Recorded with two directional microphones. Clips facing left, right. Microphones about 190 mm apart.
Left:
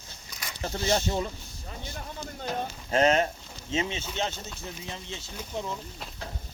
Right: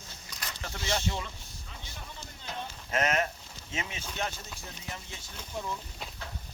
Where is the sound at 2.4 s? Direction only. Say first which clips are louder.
Left 8 dB; 55° left (ahead or behind).